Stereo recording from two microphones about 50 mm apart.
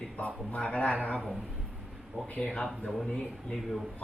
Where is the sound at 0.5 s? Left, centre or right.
Left.